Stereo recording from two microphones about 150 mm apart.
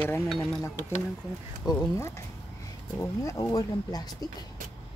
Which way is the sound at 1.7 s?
20° left (ahead or behind).